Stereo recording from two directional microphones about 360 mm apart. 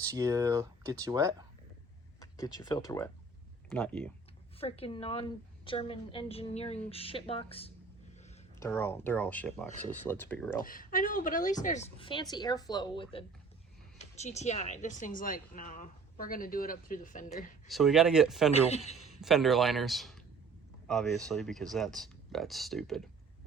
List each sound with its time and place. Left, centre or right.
0.0 s speech: centre
2.2 s speech: centre
4.6 s a woman's voice: centre
9.6 s speech: left
10.1 s speech: centre
10.6 s a woman's voice: left
17.7 s speech: centre
18.5 s a woman's voice: centre
19.2 s speech: centre